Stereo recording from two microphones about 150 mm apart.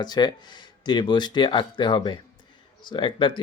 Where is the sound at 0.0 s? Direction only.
30° left (ahead or behind).